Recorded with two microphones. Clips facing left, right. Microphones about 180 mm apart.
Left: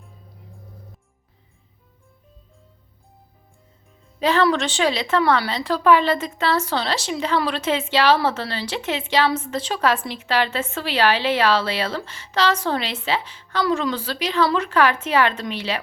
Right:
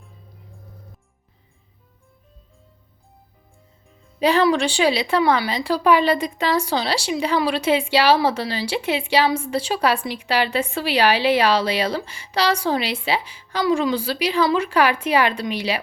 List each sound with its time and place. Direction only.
4.2 s speech: 15° right (ahead or behind)